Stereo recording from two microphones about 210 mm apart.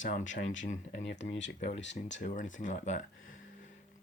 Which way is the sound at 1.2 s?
60° left (ahead or behind).